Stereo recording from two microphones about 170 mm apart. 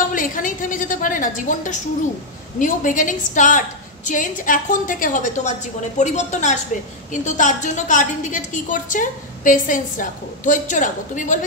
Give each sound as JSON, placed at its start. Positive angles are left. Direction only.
{"t": 0.1, "sound": "a woman's voice", "side_deg": 50}